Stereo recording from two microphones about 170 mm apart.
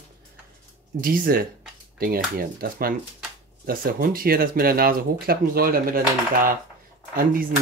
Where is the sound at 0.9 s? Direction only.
55° right (ahead or behind).